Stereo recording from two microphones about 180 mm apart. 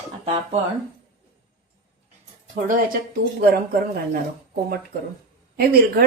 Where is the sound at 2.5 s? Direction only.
45° right (ahead or behind).